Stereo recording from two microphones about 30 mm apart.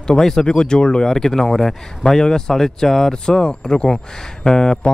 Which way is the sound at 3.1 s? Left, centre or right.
Left.